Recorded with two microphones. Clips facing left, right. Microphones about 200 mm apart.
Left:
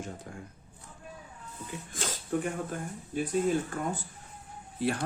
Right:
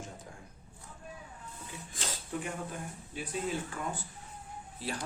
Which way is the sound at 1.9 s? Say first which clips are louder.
Left 7 dB; 50° left (ahead or behind).